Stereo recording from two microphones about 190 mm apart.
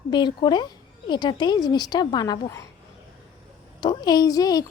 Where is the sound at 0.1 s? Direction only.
25° left (ahead or behind).